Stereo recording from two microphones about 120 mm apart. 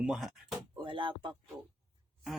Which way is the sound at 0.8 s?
45° right (ahead or behind).